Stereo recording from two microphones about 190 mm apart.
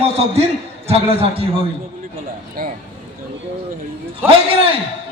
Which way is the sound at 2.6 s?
50° right (ahead or behind).